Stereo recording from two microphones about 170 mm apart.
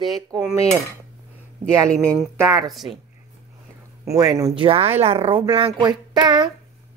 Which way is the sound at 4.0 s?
20° right (ahead or behind).